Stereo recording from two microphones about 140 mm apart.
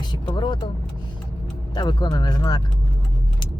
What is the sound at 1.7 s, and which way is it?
Speech, 30° left (ahead or behind).